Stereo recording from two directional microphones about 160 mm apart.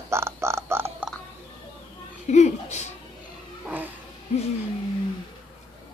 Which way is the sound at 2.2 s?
45° left (ahead or behind).